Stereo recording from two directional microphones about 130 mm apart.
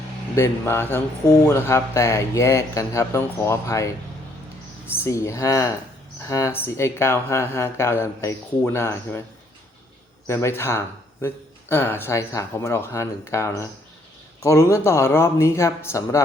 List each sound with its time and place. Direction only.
0.3 s speech: 20° left (ahead or behind)
4.9 s speech: 20° left (ahead or behind)
10.2 s speech: 20° left (ahead or behind)